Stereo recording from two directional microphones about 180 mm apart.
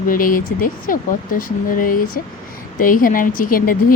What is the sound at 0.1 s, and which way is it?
Speech, 50° left (ahead or behind).